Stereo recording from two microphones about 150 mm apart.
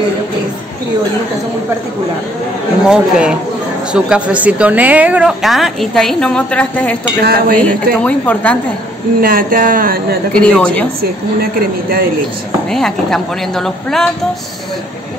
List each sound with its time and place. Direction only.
2.9 s a woman's voice: 5° right (ahead or behind); by 7.0 s 10° left (ahead or behind)
7.2 s speech: 90° right
7.5 s a woman's voice: 10° left (ahead or behind)
9.2 s speech: 70° right (ahead or behind)
10.3 s a woman's voice: 5° left (ahead or behind)
12.7 s a woman's voice: centre (ahead or behind)